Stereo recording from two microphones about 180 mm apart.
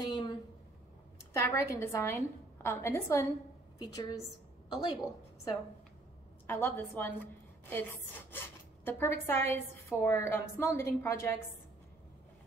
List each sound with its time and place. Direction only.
0.0 s a sound: 20° left (ahead or behind)
1.3 s a woman's voice: 15° left (ahead or behind)
8.8 s a woman's voice: 10° left (ahead or behind)